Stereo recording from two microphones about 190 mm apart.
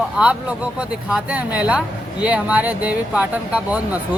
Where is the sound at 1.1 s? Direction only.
10° right (ahead or behind).